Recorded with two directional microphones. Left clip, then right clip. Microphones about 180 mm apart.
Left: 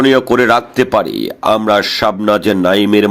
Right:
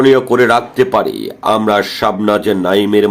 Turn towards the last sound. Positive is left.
turn(degrees=40)  # may be behind; listen again after turning